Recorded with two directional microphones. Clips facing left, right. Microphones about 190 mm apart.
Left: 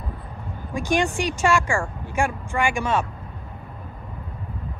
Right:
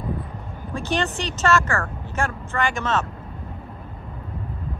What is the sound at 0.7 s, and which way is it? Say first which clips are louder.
Speech: left 3 dB; 10° left (ahead or behind).